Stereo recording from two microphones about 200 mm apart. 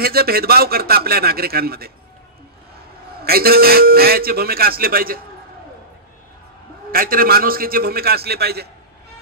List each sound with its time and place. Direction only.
0.0 s a man's voice: 50° right (ahead or behind)
3.2 s a man's voice: 50° right (ahead or behind)
6.9 s a man's voice: 45° right (ahead or behind)